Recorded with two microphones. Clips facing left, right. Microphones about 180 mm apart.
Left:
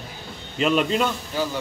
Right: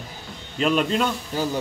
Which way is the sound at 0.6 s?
Centre (ahead or behind).